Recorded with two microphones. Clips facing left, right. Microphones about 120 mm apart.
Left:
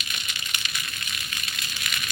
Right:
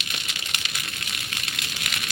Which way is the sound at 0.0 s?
85° right.